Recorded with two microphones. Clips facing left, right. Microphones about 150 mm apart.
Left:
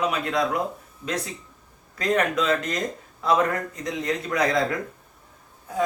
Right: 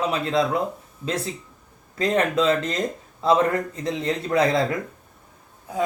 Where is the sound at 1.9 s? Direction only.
30° right (ahead or behind).